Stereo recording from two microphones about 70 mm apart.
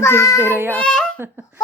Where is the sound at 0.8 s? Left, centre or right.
Centre.